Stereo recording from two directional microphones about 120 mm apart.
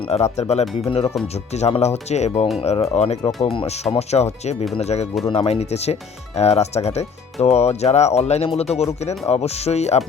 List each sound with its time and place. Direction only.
0.1 s speech: 65° left (ahead or behind)
2.6 s speech: 50° left (ahead or behind)
2.9 s speech: 65° left (ahead or behind)
3.4 s speech: 50° left (ahead or behind)
3.9 s speech: 65° left (ahead or behind)